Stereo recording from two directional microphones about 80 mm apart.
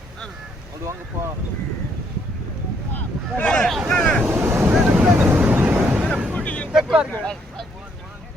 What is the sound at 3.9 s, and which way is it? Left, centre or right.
Vehicle, centre.